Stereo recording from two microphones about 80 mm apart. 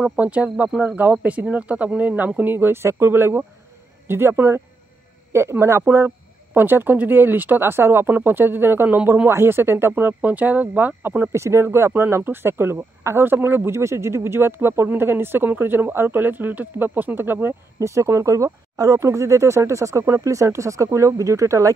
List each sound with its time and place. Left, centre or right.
0.2 s speech: centre
17.7 s speech: right